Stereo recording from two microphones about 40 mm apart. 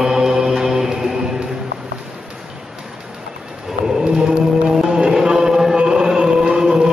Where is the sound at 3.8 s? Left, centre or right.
Centre.